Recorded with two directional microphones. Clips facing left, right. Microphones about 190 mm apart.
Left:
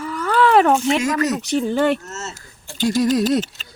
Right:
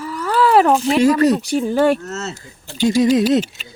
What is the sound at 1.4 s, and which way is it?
Speech, 10° right (ahead or behind).